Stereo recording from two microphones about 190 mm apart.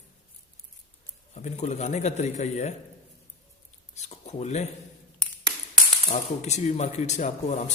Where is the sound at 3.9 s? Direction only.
35° left (ahead or behind).